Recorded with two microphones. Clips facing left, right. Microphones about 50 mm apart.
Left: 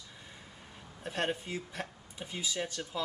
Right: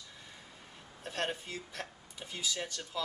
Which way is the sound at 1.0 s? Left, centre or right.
Centre.